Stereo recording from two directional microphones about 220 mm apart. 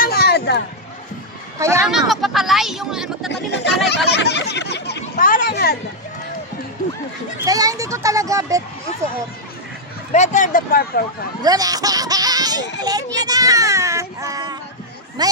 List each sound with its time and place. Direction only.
0.0 s a sound: 45° left (ahead or behind)
1.5 s speech: 15° right (ahead or behind)
1.8 s speech: centre (ahead or behind)
3.2 s speech: 50° left (ahead or behind)
7.4 s a child's voice: 15° right (ahead or behind)
10.1 s speech: 35° left (ahead or behind)
11.4 s a child's voice: 15° right (ahead or behind)